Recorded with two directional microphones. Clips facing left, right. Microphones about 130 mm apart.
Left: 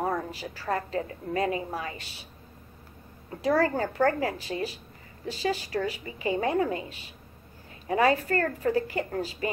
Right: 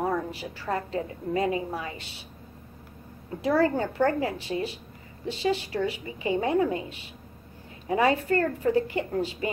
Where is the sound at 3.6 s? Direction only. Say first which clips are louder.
Right 3 dB; 20° right (ahead or behind).